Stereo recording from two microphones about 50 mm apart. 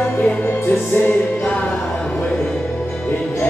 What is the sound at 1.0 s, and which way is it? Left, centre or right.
Music, left.